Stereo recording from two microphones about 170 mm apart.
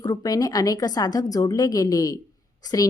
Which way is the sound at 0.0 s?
20° left (ahead or behind).